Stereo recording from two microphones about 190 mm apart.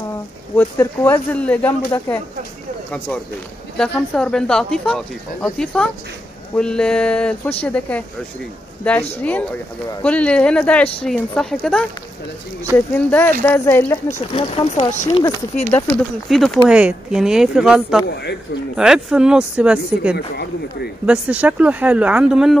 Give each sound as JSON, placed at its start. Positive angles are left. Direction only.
{"t": 0.6, "sound": "speech", "side_deg": 10}
{"t": 3.7, "sound": "speech", "side_deg": 5}
{"t": 10.0, "sound": "speech", "side_deg": 5}
{"t": 14.3, "sound": "speech", "side_deg": 25}
{"t": 15.7, "sound": "speech", "side_deg": 0}